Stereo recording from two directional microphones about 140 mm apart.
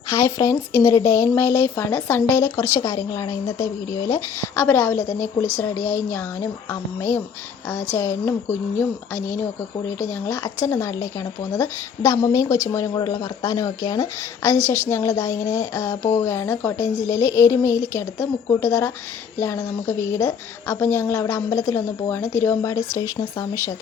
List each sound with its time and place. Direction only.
0.1 s speech: 20° left (ahead or behind)
10.0 s speech: 25° left (ahead or behind)
20.0 s speech: 25° left (ahead or behind)